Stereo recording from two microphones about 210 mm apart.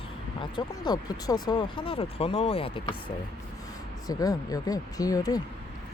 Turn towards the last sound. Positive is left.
turn(degrees=15)  # may be behind; listen again after turning